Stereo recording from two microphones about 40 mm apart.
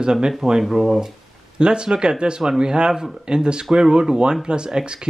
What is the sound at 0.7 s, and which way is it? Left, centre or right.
Speech, centre.